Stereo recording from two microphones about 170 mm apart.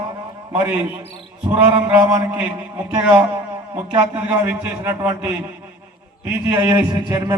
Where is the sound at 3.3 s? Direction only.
25° right (ahead or behind).